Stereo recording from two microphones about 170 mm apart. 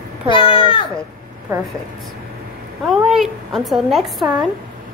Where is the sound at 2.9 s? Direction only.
Centre (ahead or behind).